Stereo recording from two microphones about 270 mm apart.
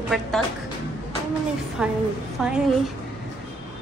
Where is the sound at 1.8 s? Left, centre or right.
Centre.